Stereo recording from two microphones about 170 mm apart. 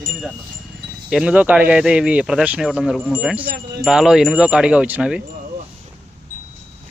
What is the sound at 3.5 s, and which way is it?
Speech, 65° right (ahead or behind).